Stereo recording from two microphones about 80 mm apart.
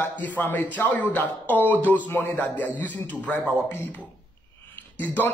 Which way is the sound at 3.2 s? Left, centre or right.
Centre.